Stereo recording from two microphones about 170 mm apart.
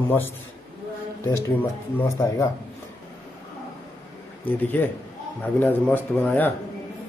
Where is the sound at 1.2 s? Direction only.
15° left (ahead or behind).